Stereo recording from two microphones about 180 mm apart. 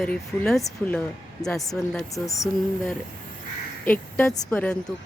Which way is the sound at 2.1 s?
20° left (ahead or behind).